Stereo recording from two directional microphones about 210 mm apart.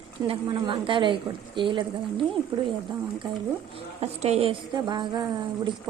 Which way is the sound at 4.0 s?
30° right (ahead or behind).